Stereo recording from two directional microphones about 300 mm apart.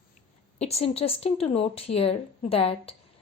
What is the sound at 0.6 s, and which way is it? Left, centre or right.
A woman's voice, centre.